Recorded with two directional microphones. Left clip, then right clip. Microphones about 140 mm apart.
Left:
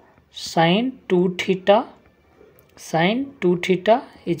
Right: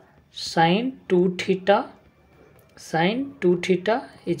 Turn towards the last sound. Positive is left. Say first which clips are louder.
# left 6 dB
turn(degrees=20)  # may be behind; listen again after turning